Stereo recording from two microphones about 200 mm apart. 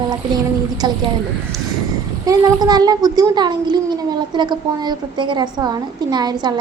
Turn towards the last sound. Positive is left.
turn(degrees=-20)  # may be behind; listen again after turning